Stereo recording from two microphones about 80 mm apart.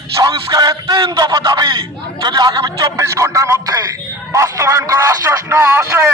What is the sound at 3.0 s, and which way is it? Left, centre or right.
A man's voice, right.